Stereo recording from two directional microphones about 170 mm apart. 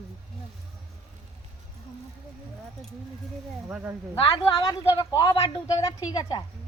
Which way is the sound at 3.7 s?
10° right (ahead or behind).